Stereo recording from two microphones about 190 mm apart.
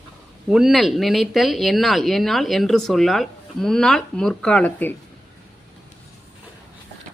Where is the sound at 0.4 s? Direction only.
5° right (ahead or behind).